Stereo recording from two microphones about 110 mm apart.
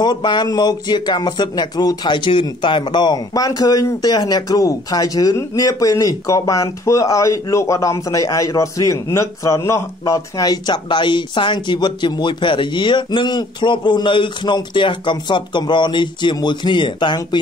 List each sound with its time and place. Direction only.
0.0 s speech: 40° left (ahead or behind)